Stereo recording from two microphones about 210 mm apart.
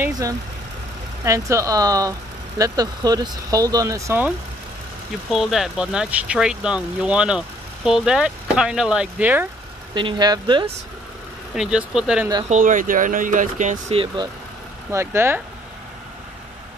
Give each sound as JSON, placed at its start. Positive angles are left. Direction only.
{"t": 0.0, "sound": "speech", "side_deg": -15}
{"t": 5.3, "sound": "speech", "side_deg": 0}
{"t": 9.9, "sound": "speech", "side_deg": -20}
{"t": 11.5, "sound": "speech", "side_deg": -5}
{"t": 12.4, "sound": "speech", "side_deg": -35}
{"t": 14.9, "sound": "speech", "side_deg": -10}